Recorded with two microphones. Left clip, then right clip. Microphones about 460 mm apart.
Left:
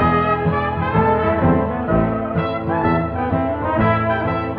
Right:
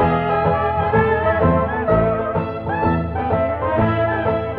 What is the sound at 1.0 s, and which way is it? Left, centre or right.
Music, centre.